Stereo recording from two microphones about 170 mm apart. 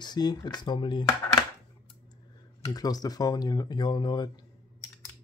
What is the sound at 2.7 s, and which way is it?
Speech, 20° left (ahead or behind).